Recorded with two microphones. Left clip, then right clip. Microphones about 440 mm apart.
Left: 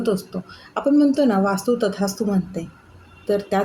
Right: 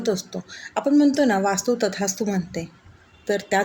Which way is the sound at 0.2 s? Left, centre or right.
Left.